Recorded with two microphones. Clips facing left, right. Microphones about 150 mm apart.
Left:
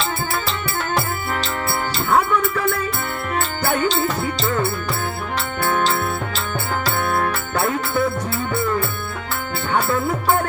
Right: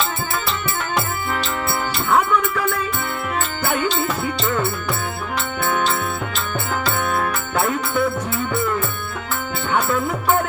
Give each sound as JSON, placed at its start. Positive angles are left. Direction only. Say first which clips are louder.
{"t": 0.9, "sound": "music", "louder": "right 1 dB", "side_deg": 35}
{"t": 5.6, "sound": "music", "louder": "left 2 dB", "side_deg": 35}
{"t": 9.7, "sound": "music", "louder": "even", "side_deg": 35}